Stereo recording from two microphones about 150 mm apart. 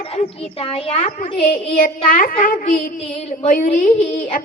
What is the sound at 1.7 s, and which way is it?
A woman's voice, 65° left (ahead or behind).